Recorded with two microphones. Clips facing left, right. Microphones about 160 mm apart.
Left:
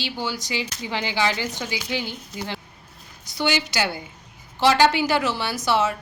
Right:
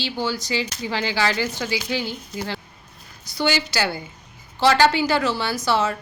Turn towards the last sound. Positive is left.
turn(degrees=15)  # may be behind; listen again after turning